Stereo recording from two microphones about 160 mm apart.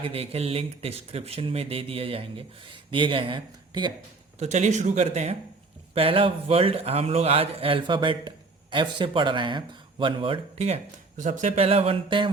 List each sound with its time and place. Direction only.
0.0 s speech: 35° right (ahead or behind)
4.4 s speech: 45° right (ahead or behind)
11.2 s speech: 50° right (ahead or behind); by 12.3 s 30° right (ahead or behind)